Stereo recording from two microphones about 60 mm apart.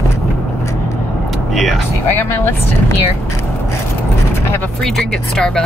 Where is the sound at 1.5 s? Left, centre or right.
Centre.